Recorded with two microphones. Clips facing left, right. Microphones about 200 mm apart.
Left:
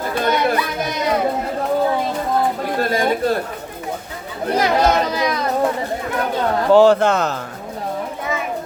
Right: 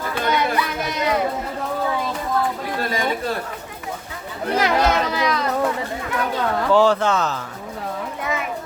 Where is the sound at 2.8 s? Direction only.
45° left (ahead or behind).